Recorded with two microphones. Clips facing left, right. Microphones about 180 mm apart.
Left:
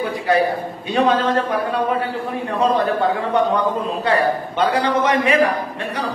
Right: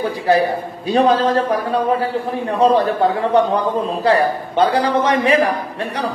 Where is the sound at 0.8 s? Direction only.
35° right (ahead or behind).